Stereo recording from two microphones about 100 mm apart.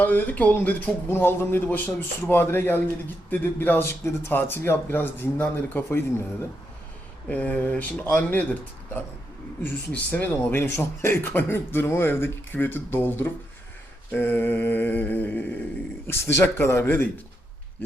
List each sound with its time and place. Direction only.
0.0 s speech: 15° left (ahead or behind)
7.3 s mantra: 15° left (ahead or behind)
9.9 s speech: 15° left (ahead or behind)
14.1 s mantra: 20° left (ahead or behind)
16.0 s speech: 25° left (ahead or behind)